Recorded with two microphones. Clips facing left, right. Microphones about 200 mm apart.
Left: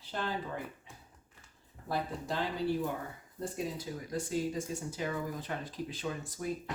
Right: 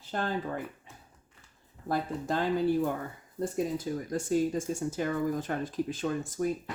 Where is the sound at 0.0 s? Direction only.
50° right (ahead or behind).